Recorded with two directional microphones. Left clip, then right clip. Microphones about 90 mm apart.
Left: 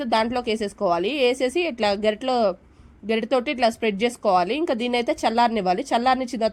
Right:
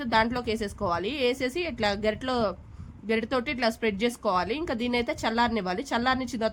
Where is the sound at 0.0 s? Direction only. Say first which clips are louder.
Left 3 dB; 35° left (ahead or behind).